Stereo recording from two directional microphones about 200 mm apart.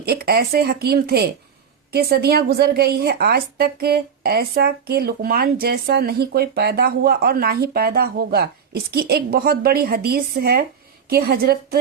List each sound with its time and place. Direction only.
0.0 s a woman's voice: 50° right (ahead or behind)